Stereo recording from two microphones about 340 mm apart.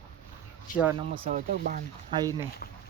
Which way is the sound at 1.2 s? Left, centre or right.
Right.